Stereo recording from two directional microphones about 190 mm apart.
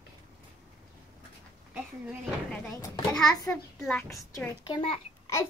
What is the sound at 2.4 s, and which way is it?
Speech, 10° left (ahead or behind).